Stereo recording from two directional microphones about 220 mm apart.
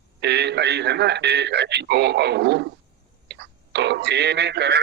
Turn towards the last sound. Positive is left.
turn(degrees=-50)  # may be behind; listen again after turning